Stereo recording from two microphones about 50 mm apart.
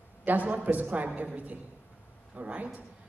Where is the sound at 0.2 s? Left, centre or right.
Right.